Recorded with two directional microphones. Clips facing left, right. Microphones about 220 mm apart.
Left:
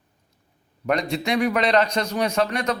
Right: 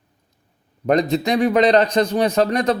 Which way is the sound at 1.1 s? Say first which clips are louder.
Right 5 dB; 35° right (ahead or behind).